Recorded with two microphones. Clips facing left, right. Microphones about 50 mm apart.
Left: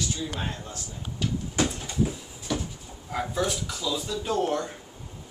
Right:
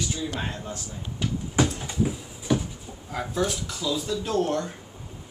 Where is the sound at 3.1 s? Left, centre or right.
Centre.